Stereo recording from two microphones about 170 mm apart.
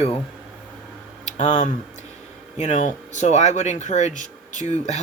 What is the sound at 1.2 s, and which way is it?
Speech, 45° left (ahead or behind).